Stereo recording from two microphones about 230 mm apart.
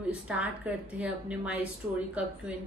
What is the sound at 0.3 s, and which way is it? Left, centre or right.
A woman's voice, centre.